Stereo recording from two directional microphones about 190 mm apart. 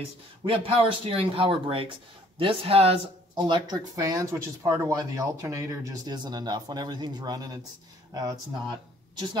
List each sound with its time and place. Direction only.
0.5 s speech: 25° right (ahead or behind)